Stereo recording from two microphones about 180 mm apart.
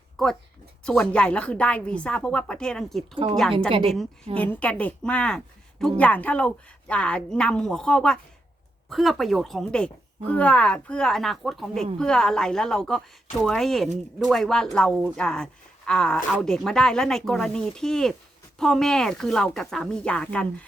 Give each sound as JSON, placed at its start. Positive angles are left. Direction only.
{"t": 0.2, "sound": "speech", "side_deg": 5}
{"t": 3.2, "sound": "a woman's voice", "side_deg": -30}
{"t": 4.4, "sound": "a woman's voice", "side_deg": 5}